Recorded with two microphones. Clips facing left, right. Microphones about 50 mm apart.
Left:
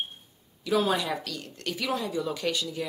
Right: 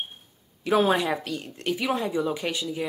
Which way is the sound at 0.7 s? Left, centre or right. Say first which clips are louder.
Right 4 dB; right.